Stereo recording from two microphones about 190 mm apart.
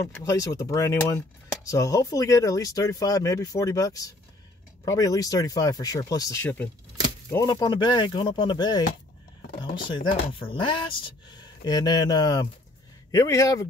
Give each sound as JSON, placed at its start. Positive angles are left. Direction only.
{"t": 0.0, "sound": "speech", "side_deg": 15}
{"t": 10.5, "sound": "speech", "side_deg": 25}